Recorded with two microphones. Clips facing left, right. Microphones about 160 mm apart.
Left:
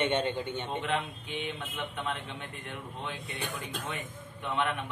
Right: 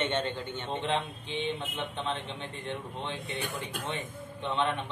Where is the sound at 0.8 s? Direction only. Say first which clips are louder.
Right 1 dB; 30° right (ahead or behind).